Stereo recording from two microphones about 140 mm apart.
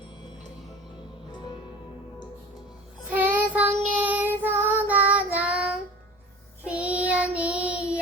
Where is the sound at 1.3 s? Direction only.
35° left (ahead or behind).